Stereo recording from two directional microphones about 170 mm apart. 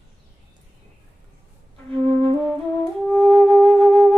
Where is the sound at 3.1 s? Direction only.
Centre (ahead or behind).